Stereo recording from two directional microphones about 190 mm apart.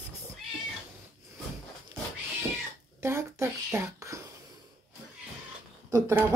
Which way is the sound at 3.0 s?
15° right (ahead or behind).